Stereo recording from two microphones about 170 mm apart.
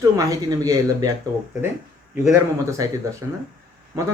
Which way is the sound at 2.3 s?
20° right (ahead or behind).